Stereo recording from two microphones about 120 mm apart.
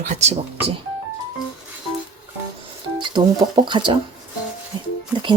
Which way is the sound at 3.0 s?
40° right (ahead or behind).